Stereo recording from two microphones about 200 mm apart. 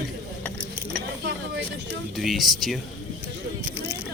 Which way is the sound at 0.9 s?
60° right (ahead or behind).